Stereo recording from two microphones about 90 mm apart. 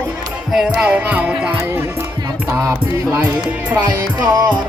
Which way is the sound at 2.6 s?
30° right (ahead or behind).